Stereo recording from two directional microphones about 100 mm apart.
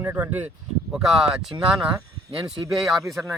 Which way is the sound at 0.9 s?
5° right (ahead or behind).